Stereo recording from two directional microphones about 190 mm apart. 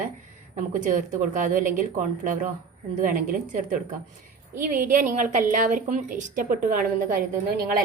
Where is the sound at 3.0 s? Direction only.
50° right (ahead or behind).